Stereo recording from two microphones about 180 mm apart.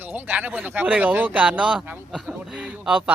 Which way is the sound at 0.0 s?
10° right (ahead or behind).